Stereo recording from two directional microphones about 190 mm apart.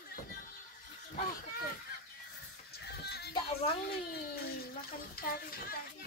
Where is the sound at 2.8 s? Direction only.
60° left (ahead or behind).